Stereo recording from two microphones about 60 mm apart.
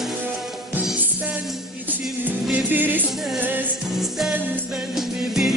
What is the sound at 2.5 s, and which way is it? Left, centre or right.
Music, right.